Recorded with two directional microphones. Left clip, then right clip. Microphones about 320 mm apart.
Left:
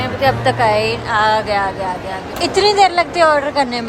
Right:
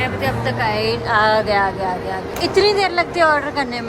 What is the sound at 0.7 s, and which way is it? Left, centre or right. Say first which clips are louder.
A woman's voice: left 3 dB; centre.